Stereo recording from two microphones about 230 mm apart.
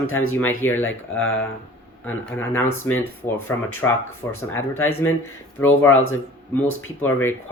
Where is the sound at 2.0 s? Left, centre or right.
Centre.